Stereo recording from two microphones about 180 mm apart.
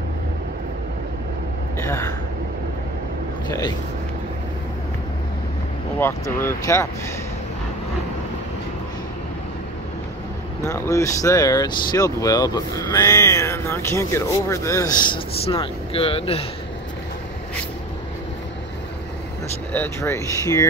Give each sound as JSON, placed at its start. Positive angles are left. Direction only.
{"t": 5.9, "sound": "speech", "side_deg": 15}
{"t": 10.6, "sound": "speech", "side_deg": 15}
{"t": 19.7, "sound": "speech", "side_deg": 10}